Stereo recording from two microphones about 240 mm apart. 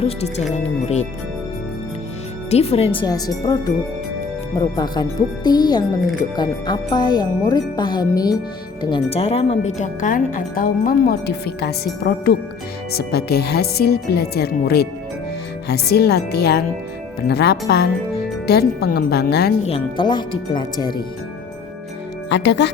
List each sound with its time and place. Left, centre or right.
0.0 s speech: left
2.5 s speech: left
4.8 s speech: centre; by 19.5 s left
19.6 s speech: left
22.3 s speech: left